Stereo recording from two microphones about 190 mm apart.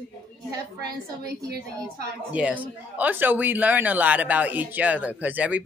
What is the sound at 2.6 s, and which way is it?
Speech, 10° right (ahead or behind).